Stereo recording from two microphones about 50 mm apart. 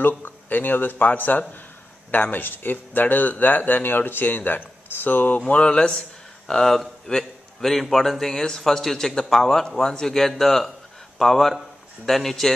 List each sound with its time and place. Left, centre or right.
0.2 s speech: left
5.5 s a man's voice: centre